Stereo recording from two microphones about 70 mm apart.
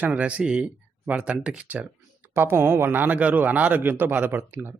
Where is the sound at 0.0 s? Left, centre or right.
Centre.